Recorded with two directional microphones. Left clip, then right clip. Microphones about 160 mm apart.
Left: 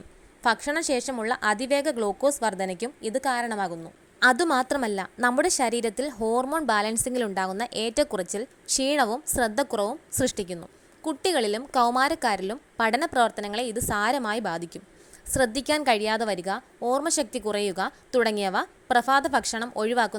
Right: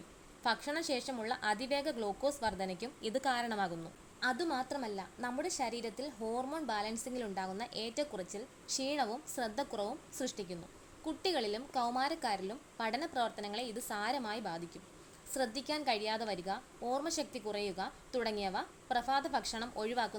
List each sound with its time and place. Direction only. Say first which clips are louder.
0.4 s a woman's voice: left 11 dB; 35° left (ahead or behind)
3.0 s a woman's voice: left 8 dB; 25° left (ahead or behind)
4.2 s a woman's voice: left 15 dB; 50° left (ahead or behind)